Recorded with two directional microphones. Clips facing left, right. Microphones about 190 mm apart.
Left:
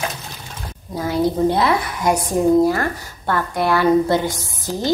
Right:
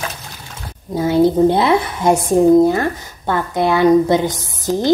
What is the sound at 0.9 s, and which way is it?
Speech, 25° right (ahead or behind).